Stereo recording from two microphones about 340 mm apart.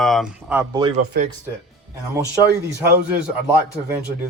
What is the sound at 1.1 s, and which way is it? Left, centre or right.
Speech, right.